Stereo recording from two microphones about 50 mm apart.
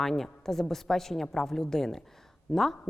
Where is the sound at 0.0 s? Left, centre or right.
Centre.